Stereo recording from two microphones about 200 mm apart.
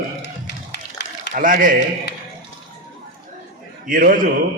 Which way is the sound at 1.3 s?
45° right (ahead or behind).